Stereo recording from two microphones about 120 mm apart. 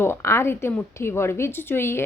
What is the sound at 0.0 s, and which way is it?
Speech, 20° left (ahead or behind).